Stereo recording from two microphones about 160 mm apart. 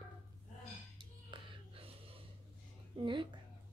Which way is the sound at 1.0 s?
30° right (ahead or behind).